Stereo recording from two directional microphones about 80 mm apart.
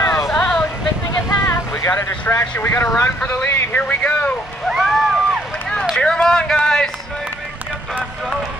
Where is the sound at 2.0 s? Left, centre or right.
Left.